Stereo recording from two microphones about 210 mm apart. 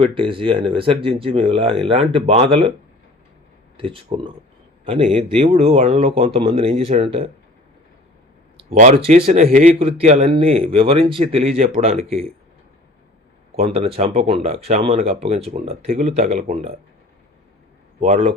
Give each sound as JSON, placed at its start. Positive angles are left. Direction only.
{"t": 0.0, "sound": "speech", "side_deg": -25}
{"t": 3.8, "sound": "speech", "side_deg": -25}
{"t": 8.7, "sound": "speech", "side_deg": -35}
{"t": 13.6, "sound": "a man's voice", "side_deg": -30}
{"t": 18.0, "sound": "a man's voice", "side_deg": -30}